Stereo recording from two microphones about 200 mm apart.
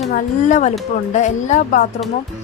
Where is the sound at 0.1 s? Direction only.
40° left (ahead or behind).